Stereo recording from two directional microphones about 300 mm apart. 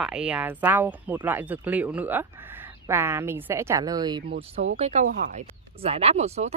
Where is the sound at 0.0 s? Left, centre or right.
Centre.